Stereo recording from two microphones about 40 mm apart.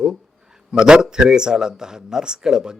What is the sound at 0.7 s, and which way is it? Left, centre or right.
A man's voice, centre.